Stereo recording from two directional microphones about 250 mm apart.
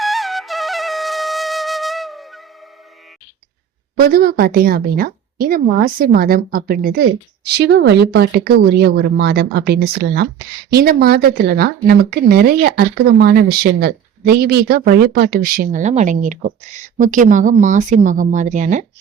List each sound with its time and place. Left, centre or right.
0.0 s flute: centre
4.0 s speech: right